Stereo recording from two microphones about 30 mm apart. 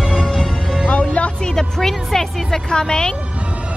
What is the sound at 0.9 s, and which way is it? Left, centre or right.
Music, left.